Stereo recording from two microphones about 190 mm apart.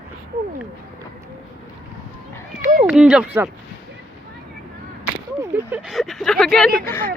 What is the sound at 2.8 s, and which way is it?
Speech, 5° right (ahead or behind).